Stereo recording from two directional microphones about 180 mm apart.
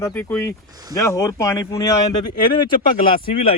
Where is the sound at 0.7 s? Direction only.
20° right (ahead or behind).